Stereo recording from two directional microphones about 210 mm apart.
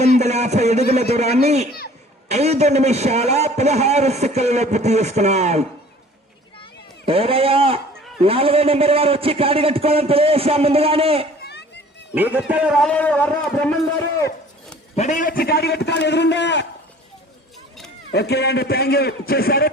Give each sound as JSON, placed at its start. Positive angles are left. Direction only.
{"t": 0.2, "sound": "a child's voice", "side_deg": -30}
{"t": 7.0, "sound": "a man's voice", "side_deg": -25}
{"t": 12.1, "sound": "a man's voice", "side_deg": -10}
{"t": 14.9, "sound": "a man's voice", "side_deg": 35}
{"t": 18.1, "sound": "a man's voice", "side_deg": 50}